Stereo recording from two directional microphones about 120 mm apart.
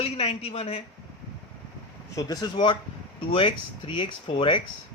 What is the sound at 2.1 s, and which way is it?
Speech, 30° left (ahead or behind).